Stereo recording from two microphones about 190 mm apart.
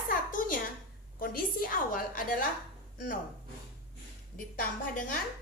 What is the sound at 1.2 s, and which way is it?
A woman's voice, 50° left (ahead or behind).